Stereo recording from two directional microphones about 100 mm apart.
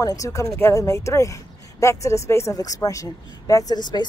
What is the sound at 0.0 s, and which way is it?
Speech, 35° left (ahead or behind).